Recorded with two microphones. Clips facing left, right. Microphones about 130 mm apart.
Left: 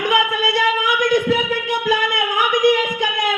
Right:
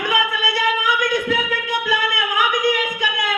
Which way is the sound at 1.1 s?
20° left (ahead or behind).